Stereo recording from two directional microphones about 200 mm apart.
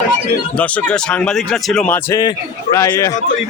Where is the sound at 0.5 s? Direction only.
5° left (ahead or behind).